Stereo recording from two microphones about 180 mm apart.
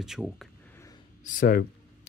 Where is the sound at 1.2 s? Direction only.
50° left (ahead or behind).